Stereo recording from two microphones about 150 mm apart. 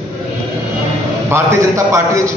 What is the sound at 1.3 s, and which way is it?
A man's voice, 20° right (ahead or behind).